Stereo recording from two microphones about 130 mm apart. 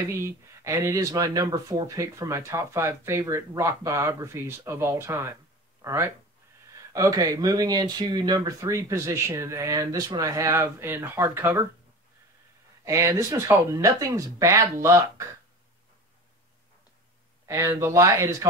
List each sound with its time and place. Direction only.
0.0 s speech: 20° right (ahead or behind)
12.8 s speech: 25° right (ahead or behind)
17.5 s speech: 25° right (ahead or behind)